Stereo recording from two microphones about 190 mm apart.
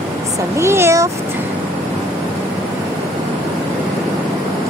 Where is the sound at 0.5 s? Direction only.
15° right (ahead or behind).